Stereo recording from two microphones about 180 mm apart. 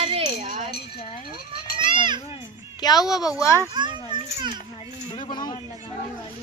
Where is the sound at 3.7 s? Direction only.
25° right (ahead or behind).